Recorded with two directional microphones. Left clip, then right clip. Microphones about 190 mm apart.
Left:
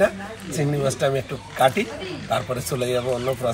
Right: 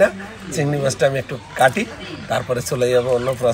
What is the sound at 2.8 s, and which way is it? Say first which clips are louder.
Speech: right 8 dB; 15° right (ahead or behind).